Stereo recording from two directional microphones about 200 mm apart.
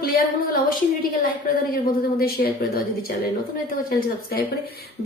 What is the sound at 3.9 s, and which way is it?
Speech, 45° left (ahead or behind).